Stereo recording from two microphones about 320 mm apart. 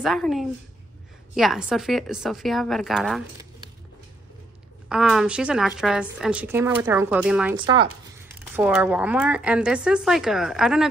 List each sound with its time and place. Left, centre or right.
0.0 s a woman's voice: centre
4.8 s a woman's voice: centre
7.5 s speech: centre
8.5 s a woman's voice: centre